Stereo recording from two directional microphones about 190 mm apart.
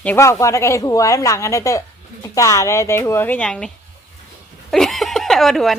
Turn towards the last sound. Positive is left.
turn(degrees=0)  # may be behind; listen again after turning